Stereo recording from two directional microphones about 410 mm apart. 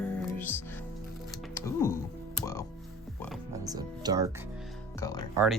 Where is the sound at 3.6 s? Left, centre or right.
Centre.